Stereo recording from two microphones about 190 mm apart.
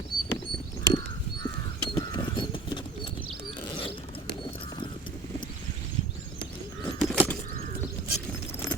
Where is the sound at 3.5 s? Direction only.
25° left (ahead or behind).